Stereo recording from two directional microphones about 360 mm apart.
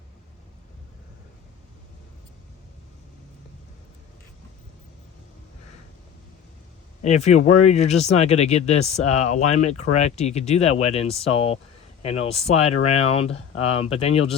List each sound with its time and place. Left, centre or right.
7.0 s speech: centre